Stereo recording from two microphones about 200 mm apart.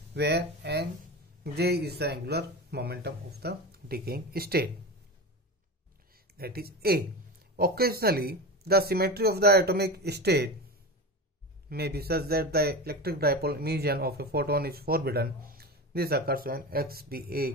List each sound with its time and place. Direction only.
0.1 s speech: 55° right (ahead or behind)
6.3 s speech: 50° right (ahead or behind)
11.7 s speech: 50° right (ahead or behind)